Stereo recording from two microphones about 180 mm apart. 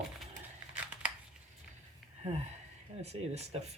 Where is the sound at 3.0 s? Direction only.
35° right (ahead or behind).